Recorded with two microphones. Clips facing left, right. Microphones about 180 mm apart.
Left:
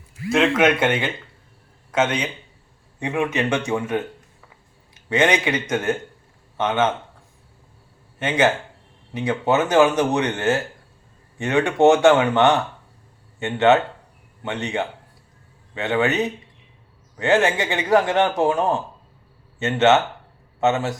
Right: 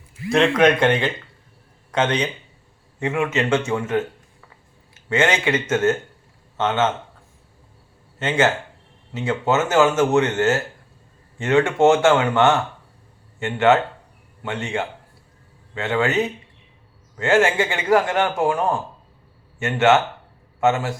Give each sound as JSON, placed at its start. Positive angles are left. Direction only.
{"t": 0.3, "sound": "a man's voice", "side_deg": 5}
{"t": 9.1, "sound": "a man's voice", "side_deg": 15}